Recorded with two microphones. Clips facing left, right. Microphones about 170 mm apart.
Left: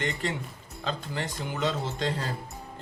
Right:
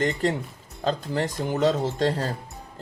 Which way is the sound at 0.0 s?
40° right (ahead or behind).